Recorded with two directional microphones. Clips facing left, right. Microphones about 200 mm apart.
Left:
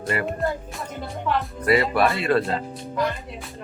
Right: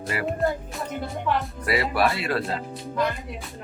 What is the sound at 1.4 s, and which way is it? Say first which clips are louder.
Speech: left 5 dB; centre (ahead or behind).